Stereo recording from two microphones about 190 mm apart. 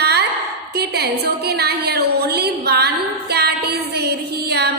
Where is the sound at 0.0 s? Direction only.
60° right (ahead or behind).